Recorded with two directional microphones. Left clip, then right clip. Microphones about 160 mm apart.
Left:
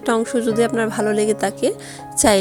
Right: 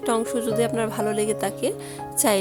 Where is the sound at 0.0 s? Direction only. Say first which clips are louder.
Left 5 dB; 20° left (ahead or behind).